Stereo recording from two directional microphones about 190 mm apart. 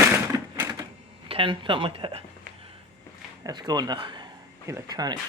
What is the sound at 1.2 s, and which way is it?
Speech, 30° right (ahead or behind).